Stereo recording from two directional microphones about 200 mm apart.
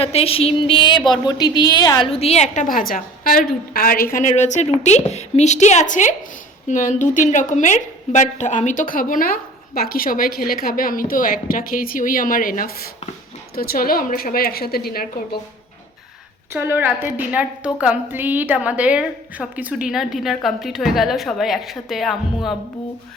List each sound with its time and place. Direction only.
0.0 s a sound: 30° left (ahead or behind)
1.1 s a woman's voice: 20° left (ahead or behind); by 15.4 s 50° left (ahead or behind)
16.5 s a woman's voice: 10° right (ahead or behind)